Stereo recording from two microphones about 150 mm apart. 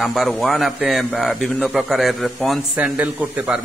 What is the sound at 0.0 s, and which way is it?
A man's voice, centre (ahead or behind).